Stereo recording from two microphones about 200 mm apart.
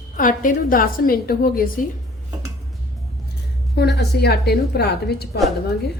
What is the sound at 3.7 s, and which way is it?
A woman's voice, 55° left (ahead or behind).